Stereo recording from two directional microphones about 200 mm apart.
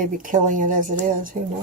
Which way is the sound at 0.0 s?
40° right (ahead or behind).